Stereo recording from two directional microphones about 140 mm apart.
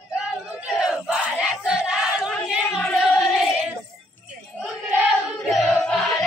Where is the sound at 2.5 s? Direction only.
5° right (ahead or behind).